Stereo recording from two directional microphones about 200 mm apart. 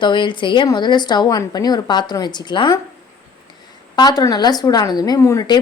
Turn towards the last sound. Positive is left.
turn(degrees=15)  # may be behind; listen again after turning